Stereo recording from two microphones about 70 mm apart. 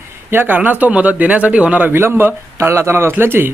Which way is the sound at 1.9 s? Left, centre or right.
Right.